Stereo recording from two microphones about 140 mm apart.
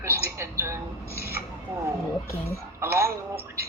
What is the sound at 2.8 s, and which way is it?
Speech, 20° right (ahead or behind).